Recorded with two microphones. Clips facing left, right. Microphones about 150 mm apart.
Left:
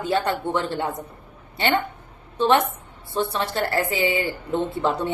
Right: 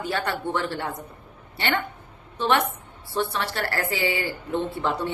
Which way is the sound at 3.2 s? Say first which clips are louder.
Left 3 dB; 20° left (ahead or behind).